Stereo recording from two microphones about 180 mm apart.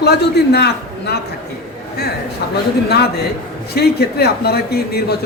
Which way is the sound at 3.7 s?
60° left (ahead or behind).